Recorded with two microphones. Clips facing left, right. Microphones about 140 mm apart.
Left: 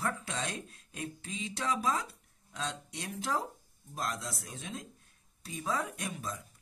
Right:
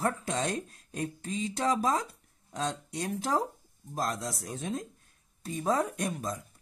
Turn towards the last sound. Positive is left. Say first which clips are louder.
# right 6 dB
turn(degrees=-40)  # may be behind; listen again after turning